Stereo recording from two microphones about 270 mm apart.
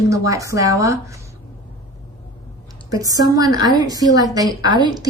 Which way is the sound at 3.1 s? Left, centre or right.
Centre.